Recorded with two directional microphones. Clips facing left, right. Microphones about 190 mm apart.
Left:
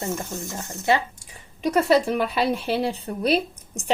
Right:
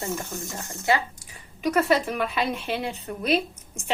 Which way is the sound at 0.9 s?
25° left (ahead or behind).